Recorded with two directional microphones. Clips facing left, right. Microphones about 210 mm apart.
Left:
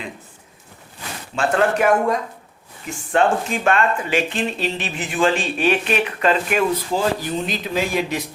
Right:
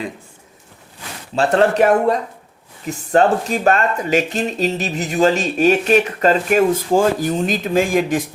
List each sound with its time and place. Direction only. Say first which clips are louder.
1.4 s speech: right 4 dB; 35° right (ahead or behind)